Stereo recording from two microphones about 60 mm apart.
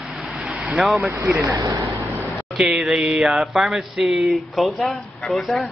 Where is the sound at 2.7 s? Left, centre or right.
Centre.